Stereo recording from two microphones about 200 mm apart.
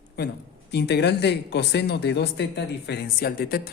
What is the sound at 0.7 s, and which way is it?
Speech, 55° left (ahead or behind).